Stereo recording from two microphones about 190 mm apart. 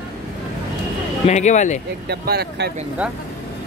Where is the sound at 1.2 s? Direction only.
35° left (ahead or behind).